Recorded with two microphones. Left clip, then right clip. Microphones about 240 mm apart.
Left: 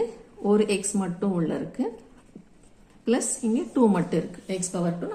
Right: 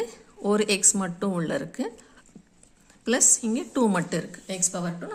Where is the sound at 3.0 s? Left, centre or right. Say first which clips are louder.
Right 2 dB; right.